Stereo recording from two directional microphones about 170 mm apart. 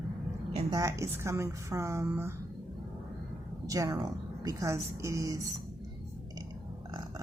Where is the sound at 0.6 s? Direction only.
20° right (ahead or behind).